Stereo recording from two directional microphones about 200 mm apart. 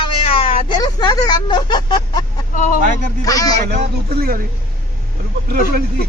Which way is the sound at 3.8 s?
45° right (ahead or behind).